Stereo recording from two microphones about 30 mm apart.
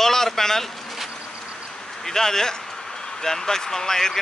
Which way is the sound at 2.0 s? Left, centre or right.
Centre.